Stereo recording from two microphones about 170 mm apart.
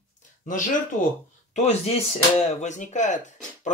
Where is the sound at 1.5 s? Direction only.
40° left (ahead or behind).